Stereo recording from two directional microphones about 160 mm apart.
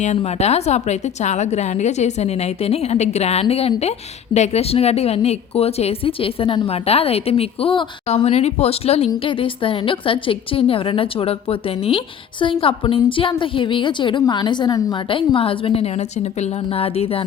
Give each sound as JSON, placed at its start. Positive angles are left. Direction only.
{"t": 0.0, "sound": "a woman's voice", "side_deg": 45}